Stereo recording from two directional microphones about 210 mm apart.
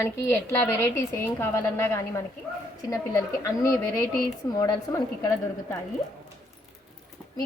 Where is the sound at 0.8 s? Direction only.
15° left (ahead or behind).